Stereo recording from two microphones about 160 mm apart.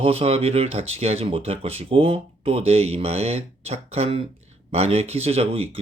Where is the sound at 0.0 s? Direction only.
35° right (ahead or behind).